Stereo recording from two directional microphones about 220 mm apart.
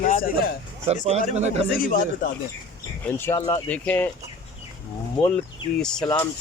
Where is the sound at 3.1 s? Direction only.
10° left (ahead or behind).